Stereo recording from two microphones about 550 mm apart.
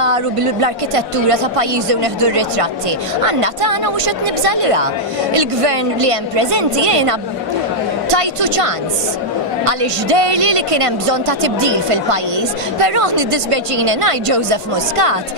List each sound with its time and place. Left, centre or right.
0.0 s a woman's voice: right